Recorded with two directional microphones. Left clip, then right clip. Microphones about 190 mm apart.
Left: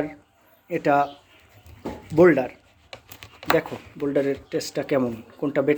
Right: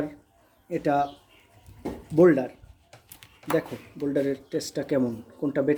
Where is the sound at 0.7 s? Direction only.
15° right (ahead or behind).